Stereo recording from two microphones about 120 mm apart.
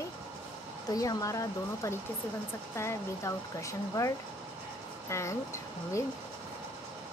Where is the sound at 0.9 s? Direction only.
30° left (ahead or behind).